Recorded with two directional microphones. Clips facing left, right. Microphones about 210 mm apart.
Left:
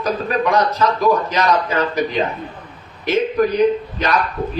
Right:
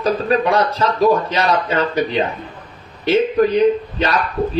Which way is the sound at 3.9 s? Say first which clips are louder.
Even; 30° right (ahead or behind).